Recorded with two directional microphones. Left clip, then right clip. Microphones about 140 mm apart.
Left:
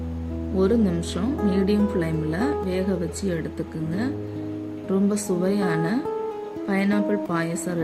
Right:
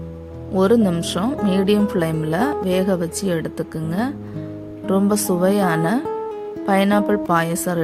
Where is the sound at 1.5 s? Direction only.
90° right.